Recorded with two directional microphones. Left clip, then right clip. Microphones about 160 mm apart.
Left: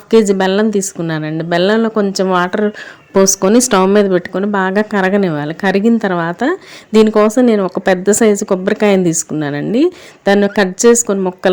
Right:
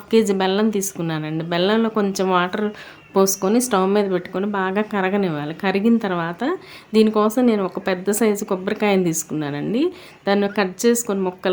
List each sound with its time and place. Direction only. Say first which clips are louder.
0.1 s speech: left 7 dB; 35° left (ahead or behind)